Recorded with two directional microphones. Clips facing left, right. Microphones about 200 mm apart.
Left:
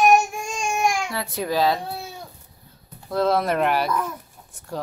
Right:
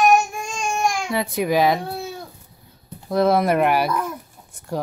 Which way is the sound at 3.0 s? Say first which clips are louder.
Right 3 dB; 15° right (ahead or behind).